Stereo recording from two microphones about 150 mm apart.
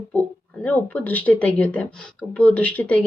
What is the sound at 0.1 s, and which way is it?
Speech, 10° left (ahead or behind).